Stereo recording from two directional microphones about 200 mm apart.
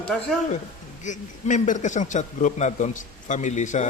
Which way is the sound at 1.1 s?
40° left (ahead or behind).